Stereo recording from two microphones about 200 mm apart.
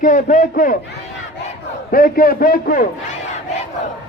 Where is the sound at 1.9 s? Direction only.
45° left (ahead or behind).